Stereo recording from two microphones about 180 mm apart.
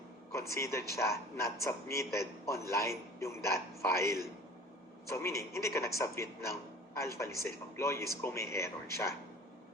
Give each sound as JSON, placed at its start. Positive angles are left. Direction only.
{"t": 0.3, "sound": "a man's voice", "side_deg": 15}